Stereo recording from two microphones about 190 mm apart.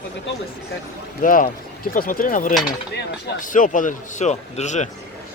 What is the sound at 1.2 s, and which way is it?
A man's voice, 45° left (ahead or behind).